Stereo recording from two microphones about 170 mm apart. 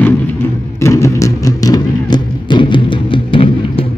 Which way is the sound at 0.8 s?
15° left (ahead or behind).